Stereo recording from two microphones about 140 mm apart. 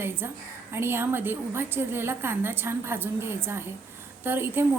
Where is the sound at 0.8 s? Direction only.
15° right (ahead or behind).